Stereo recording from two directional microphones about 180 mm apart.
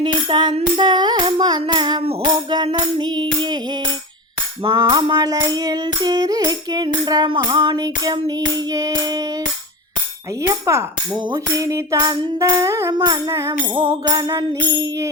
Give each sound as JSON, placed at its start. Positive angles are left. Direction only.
{"t": 0.0, "sound": "tambourine", "side_deg": -25}
{"t": 2.6, "sound": "clapping", "side_deg": -25}
{"t": 4.6, "sound": "music", "side_deg": -25}
{"t": 10.4, "sound": "music", "side_deg": -15}